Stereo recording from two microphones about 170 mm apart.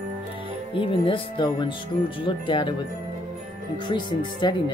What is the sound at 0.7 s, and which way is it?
Speech, 30° left (ahead or behind).